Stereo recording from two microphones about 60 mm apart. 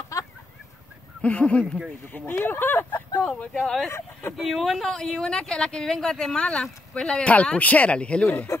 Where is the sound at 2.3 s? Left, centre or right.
Left.